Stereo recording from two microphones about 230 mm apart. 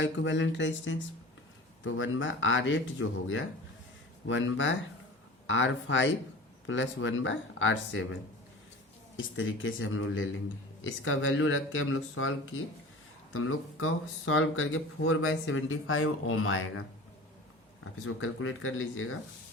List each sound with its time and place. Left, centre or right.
0.0 s speech: left
13.3 s speech: left
18.0 s speech: left